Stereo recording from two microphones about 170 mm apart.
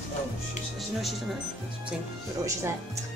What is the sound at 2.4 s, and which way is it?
Speech, 20° right (ahead or behind).